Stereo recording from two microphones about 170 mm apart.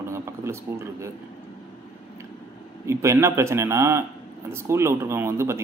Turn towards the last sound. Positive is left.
turn(degrees=-15)  # may be behind; listen again after turning